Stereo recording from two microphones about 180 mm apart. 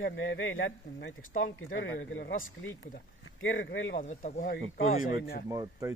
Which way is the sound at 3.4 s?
90° left.